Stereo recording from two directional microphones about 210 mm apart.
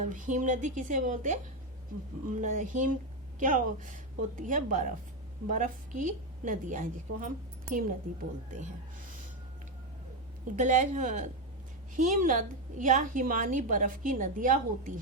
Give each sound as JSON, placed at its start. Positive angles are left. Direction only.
{"t": 0.1, "sound": "a woman's voice", "side_deg": -35}
{"t": 8.4, "sound": "a woman's voice", "side_deg": -35}
{"t": 10.5, "sound": "a woman's voice", "side_deg": -35}